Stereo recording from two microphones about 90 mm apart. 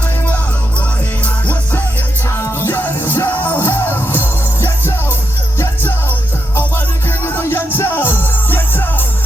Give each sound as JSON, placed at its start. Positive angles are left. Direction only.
{"t": 1.2, "sound": "music", "side_deg": 15}
{"t": 7.3, "sound": "music", "side_deg": 25}